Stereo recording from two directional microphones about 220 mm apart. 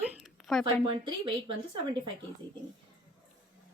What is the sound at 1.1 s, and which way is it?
Speech, 20° right (ahead or behind).